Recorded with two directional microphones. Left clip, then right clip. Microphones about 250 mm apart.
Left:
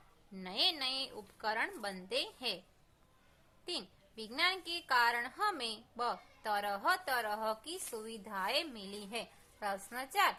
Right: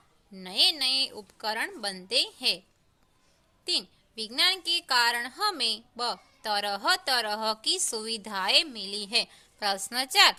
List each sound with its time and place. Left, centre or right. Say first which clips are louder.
0.3 s a woman's voice: right 9 dB; right
3.6 s a woman's voice: right 12 dB; right